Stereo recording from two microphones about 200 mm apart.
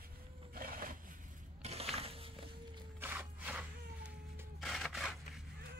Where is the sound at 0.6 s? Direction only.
45° right (ahead or behind).